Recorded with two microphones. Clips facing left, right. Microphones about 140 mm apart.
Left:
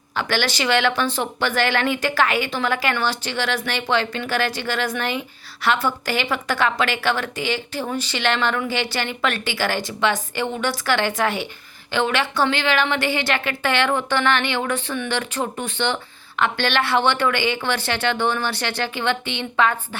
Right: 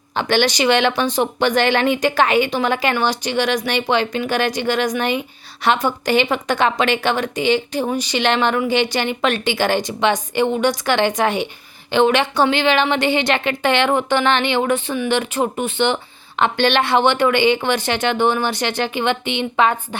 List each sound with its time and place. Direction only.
0.2 s speech: 20° right (ahead or behind)